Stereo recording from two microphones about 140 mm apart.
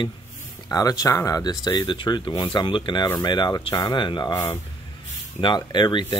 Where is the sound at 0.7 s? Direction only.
25° left (ahead or behind).